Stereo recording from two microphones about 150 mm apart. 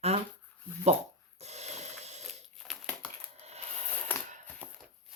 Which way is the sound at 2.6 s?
5° left (ahead or behind).